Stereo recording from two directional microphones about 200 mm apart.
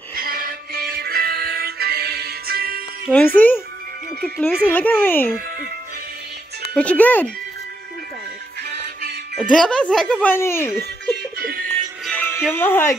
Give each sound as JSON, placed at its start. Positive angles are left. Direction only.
{"t": 0.3, "sound": "music", "side_deg": -50}
{"t": 3.1, "sound": "speech", "side_deg": 10}
{"t": 6.7, "sound": "speech", "side_deg": 5}
{"t": 8.6, "sound": "music", "side_deg": -55}
{"t": 9.4, "sound": "speech", "side_deg": 5}
{"t": 11.3, "sound": "music", "side_deg": -50}
{"t": 12.1, "sound": "music", "side_deg": 10}